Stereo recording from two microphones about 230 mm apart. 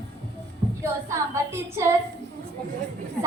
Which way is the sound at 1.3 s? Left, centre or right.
Centre.